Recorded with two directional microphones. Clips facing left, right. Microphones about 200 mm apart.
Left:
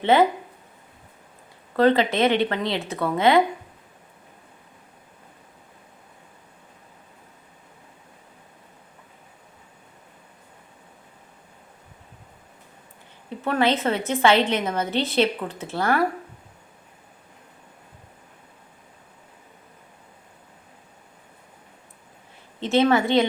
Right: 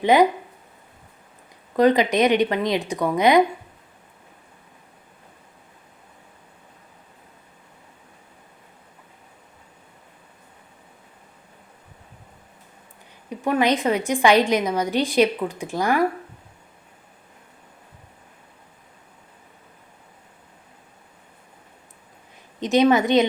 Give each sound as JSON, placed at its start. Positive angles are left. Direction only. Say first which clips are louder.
{"t": 0.0, "sound": "a woman's voice", "louder": "right 2 dB", "side_deg": -15}
{"t": 1.7, "sound": "a woman's voice", "louder": "right 2 dB", "side_deg": -15}
{"t": 13.3, "sound": "a woman's voice", "louder": "right 2 dB", "side_deg": -15}
{"t": 22.6, "sound": "a woman's voice", "louder": "right 2 dB", "side_deg": -15}